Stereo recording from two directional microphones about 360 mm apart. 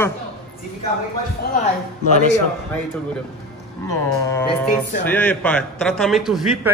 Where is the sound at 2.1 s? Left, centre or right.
Centre.